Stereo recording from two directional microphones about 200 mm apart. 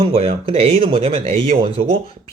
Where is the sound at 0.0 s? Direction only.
30° right (ahead or behind).